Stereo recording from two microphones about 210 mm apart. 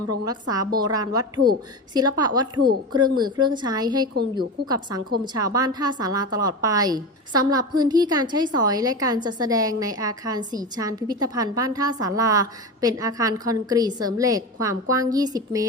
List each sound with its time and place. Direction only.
0.3 s a woman's voice: 20° right (ahead or behind)